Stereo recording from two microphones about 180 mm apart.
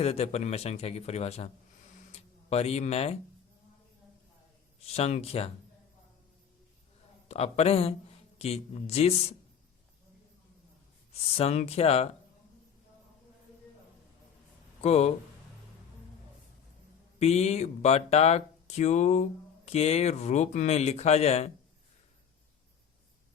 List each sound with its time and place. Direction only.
0.0 s speech: 35° left (ahead or behind)
4.9 s speech: 35° left (ahead or behind)
7.3 s speech: 35° left (ahead or behind)
11.1 s speech: 35° left (ahead or behind)
14.8 s speech: 35° left (ahead or behind)
17.2 s speech: 35° left (ahead or behind)